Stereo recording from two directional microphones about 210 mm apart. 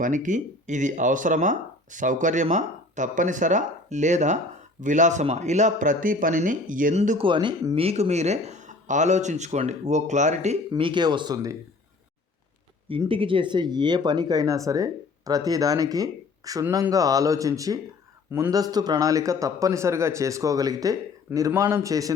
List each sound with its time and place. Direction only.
0.0 s speech: 35° right (ahead or behind)
7.3 s speech: 20° right (ahead or behind)
7.8 s speech: 30° right (ahead or behind)
10.7 s speech: 25° right (ahead or behind)
13.1 s speech: 25° right (ahead or behind)